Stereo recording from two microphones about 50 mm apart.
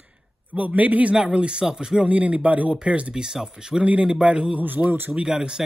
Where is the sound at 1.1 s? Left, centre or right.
Centre.